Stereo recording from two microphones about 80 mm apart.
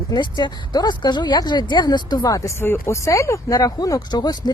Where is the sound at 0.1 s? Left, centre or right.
Left.